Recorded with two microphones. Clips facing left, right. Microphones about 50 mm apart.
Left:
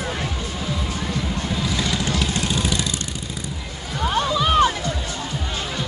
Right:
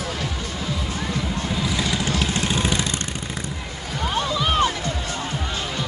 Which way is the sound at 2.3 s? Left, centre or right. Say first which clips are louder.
Right 1 dB; right.